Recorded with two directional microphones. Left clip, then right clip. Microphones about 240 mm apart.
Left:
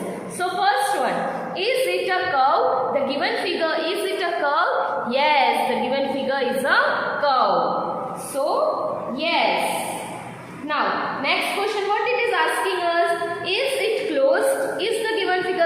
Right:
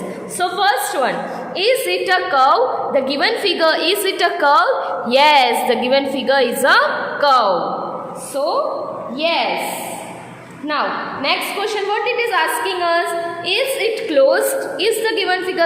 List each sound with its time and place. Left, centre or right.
0.3 s a sound: right
1.5 s a woman's voice: right
11.2 s a woman's voice: right
14.1 s a woman's voice: right